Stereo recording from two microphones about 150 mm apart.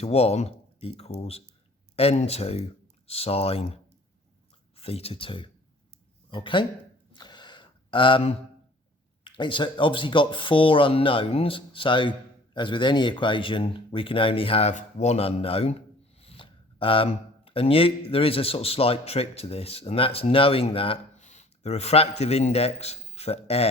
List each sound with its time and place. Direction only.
0.0 s speech: 45° left (ahead or behind)
4.8 s speech: 40° left (ahead or behind)
7.1 s a sound: 30° left (ahead or behind)
9.2 s speech: 30° left (ahead or behind)
14.7 s speech: 50° left (ahead or behind)
21.2 s a man's voice: 50° left (ahead or behind)